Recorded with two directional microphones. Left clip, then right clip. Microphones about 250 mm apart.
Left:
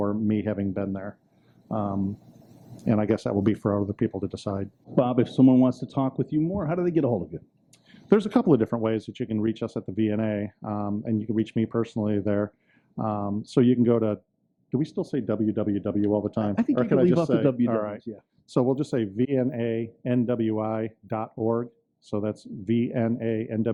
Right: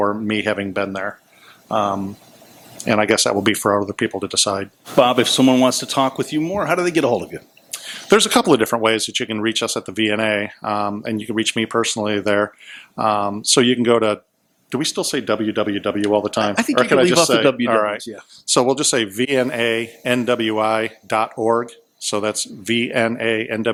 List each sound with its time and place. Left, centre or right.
0.0 s speech: centre
3.6 s speech: centre
3.8 s speech: centre